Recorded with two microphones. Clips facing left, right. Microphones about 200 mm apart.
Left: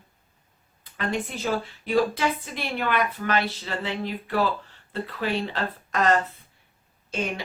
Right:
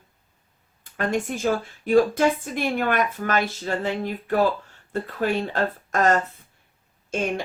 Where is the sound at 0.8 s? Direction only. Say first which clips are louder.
Right 4 dB; 45° right (ahead or behind).